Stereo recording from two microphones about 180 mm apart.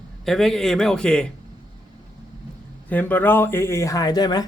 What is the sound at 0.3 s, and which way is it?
A man's voice, centre (ahead or behind).